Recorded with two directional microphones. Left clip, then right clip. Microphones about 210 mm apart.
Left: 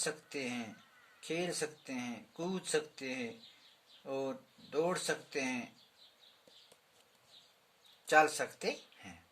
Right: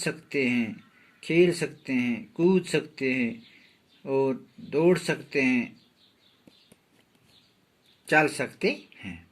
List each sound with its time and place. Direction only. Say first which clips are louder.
0.0 s speech: right 11 dB; 15° right (ahead or behind)
8.0 s speech: right 6 dB; 15° right (ahead or behind)